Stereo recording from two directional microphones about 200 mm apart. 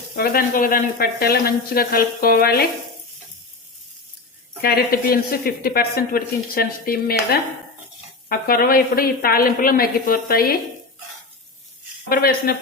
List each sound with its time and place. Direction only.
0.2 s speech: 45° left (ahead or behind)
4.6 s speech: 50° left (ahead or behind)
12.0 s speech: 50° left (ahead or behind)